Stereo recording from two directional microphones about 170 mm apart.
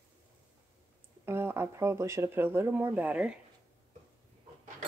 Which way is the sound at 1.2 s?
15° right (ahead or behind).